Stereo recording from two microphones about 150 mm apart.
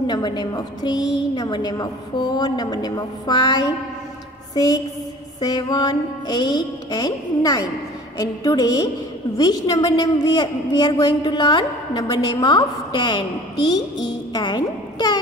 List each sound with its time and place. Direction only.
0.0 s a woman's voice: 30° left (ahead or behind)
14.3 s a woman's voice: 30° left (ahead or behind)